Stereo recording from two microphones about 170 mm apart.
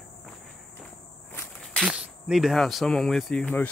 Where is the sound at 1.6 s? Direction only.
Centre (ahead or behind).